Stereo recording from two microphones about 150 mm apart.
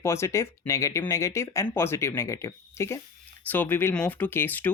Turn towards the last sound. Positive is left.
turn(degrees=10)  # may be behind; listen again after turning